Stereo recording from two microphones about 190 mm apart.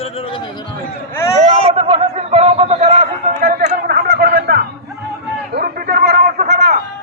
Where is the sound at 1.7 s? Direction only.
30° right (ahead or behind).